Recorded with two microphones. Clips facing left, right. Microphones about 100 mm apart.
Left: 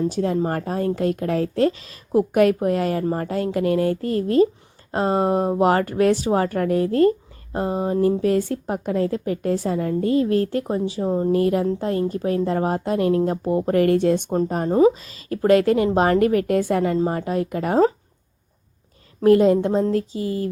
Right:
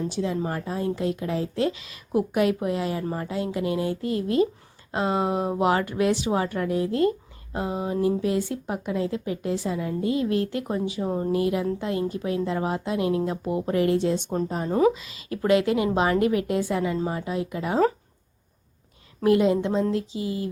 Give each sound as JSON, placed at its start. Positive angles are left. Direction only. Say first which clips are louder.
{"t": 0.1, "sound": "a woman's voice", "louder": "left 5 dB", "side_deg": 50}
{"t": 11.0, "sound": "a woman's voice", "louder": "left 7 dB", "side_deg": 20}
{"t": 11.3, "sound": "a woman's voice", "louder": "left 5 dB", "side_deg": 45}
{"t": 14.7, "sound": "a woman's voice", "louder": "left 5 dB", "side_deg": 40}
{"t": 19.2, "sound": "a woman's voice", "louder": "left 5 dB", "side_deg": 40}